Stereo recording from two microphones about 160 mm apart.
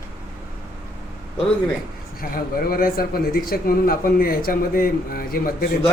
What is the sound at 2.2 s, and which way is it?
Speech, 65° left (ahead or behind).